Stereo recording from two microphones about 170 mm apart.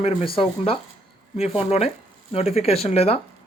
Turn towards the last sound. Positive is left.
turn(degrees=35)  # may be behind; listen again after turning